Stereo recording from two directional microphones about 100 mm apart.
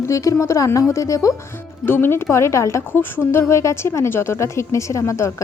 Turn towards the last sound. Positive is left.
turn(degrees=30)  # may be behind; listen again after turning